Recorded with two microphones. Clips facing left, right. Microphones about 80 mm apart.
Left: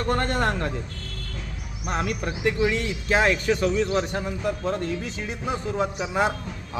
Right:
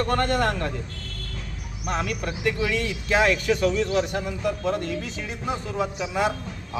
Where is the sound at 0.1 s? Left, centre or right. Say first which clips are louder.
Right 1 dB; left.